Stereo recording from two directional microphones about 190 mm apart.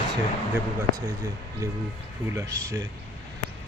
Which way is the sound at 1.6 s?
15° right (ahead or behind).